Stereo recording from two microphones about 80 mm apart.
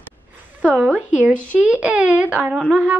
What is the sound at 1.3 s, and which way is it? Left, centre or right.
Speech, centre.